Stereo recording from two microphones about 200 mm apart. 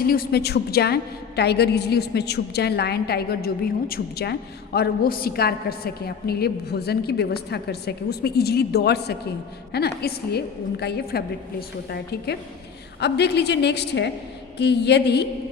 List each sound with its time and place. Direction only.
0.0 s a woman's voice: 45° left (ahead or behind)